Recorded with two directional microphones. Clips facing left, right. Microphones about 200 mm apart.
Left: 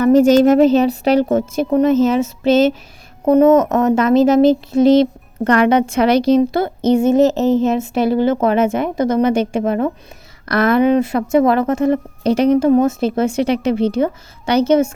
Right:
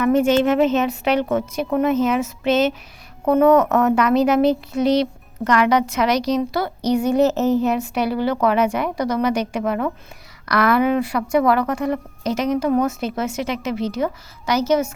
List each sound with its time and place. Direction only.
0.0 s a woman's voice: 40° left (ahead or behind)
3.4 s speech: 20° left (ahead or behind)